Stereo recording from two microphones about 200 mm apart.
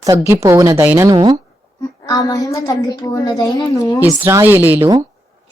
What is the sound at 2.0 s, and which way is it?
A woman's voice, 20° left (ahead or behind).